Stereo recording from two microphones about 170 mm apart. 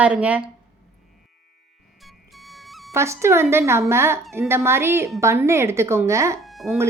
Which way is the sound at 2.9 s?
15° right (ahead or behind).